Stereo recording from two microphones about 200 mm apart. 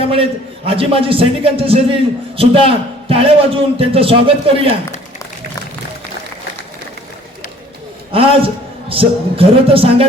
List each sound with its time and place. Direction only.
0.1 s a man's voice: 30° right (ahead or behind)
8.1 s a man's voice: 30° right (ahead or behind)